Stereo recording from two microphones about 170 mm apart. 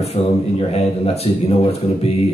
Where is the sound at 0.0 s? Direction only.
35° left (ahead or behind).